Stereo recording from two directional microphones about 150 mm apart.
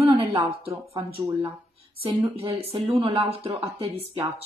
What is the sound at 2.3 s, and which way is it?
A woman's voice, 40° right (ahead or behind).